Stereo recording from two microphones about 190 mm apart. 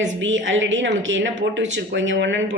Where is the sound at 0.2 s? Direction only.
80° right.